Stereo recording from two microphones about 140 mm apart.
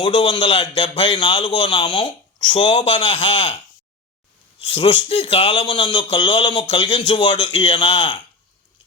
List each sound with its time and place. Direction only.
0.0 s a man's voice: 40° left (ahead or behind)
4.6 s a man's voice: 40° left (ahead or behind)